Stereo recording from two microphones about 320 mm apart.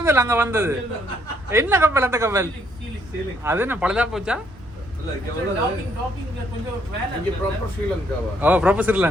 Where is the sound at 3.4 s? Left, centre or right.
Centre.